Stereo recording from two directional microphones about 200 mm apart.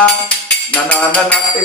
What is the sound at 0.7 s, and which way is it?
Music, 10° left (ahead or behind).